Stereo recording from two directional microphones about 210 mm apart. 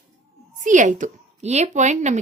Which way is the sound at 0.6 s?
35° right (ahead or behind).